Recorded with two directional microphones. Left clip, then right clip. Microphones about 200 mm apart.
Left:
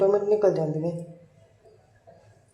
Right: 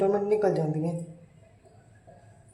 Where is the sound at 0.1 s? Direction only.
10° left (ahead or behind).